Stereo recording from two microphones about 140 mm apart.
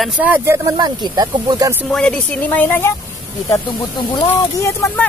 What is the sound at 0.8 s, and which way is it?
Speech, 30° right (ahead or behind).